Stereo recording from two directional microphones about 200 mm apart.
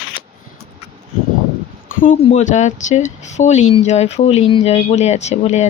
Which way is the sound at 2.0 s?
40° left (ahead or behind).